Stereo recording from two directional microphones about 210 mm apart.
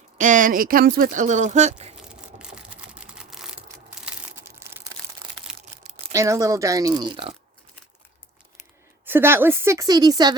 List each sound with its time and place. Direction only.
0.2 s speech: 40° right (ahead or behind)
2.0 s a sound: 5° right (ahead or behind)
5.8 s speech: 15° right (ahead or behind)
9.0 s speech: 10° right (ahead or behind)